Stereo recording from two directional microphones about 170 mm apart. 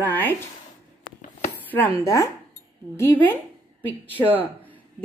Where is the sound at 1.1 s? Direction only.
45° left (ahead or behind).